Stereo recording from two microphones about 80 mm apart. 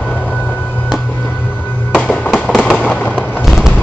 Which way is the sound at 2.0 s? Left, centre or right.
Centre.